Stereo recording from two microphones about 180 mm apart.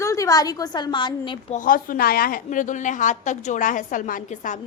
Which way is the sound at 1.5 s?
50° left (ahead or behind).